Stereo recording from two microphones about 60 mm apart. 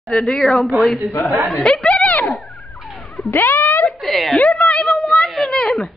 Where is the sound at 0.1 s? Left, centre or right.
Centre.